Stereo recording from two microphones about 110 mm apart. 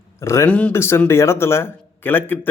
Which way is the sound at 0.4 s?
10° left (ahead or behind).